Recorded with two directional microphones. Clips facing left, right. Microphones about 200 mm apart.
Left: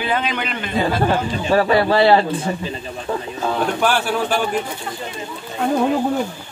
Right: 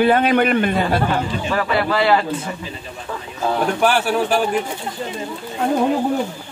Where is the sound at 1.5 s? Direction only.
35° left (ahead or behind).